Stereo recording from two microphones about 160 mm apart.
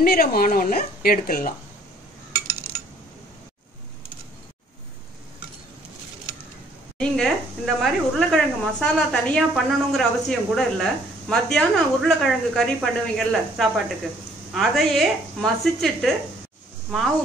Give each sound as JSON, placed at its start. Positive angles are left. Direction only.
{"t": 0.0, "sound": "speech", "side_deg": 70}
{"t": 7.0, "sound": "speech", "side_deg": 0}